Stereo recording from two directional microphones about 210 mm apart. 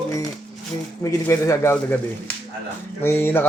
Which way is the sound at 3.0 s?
10° left (ahead or behind).